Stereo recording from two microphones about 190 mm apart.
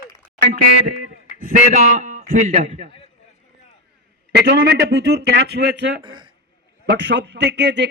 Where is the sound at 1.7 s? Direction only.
40° right (ahead or behind).